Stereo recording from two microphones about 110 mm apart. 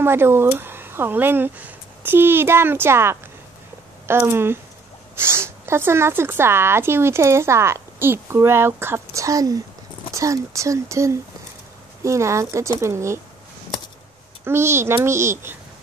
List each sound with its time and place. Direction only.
0.0 s speech: 20° right (ahead or behind)
14.4 s speech: 25° right (ahead or behind)